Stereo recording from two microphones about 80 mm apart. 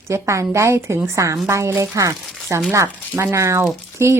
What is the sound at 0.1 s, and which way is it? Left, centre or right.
Speech, right.